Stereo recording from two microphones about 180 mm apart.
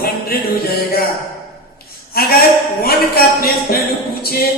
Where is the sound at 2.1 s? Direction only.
60° left (ahead or behind).